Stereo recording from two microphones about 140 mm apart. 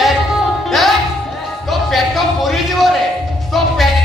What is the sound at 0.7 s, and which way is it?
Music, centre (ahead or behind).